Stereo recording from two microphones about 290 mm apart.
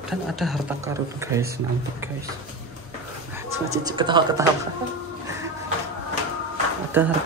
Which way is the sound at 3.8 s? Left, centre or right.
Centre.